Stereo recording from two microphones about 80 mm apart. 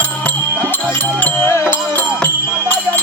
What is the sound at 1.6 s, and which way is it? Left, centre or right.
Music, centre.